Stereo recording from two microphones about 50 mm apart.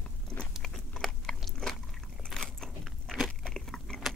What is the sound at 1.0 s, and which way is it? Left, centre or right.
Biting, centre.